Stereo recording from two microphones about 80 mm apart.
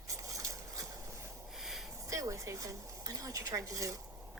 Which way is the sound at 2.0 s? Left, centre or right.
Right.